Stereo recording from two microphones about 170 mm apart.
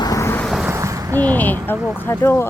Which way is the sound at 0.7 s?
15° right (ahead or behind).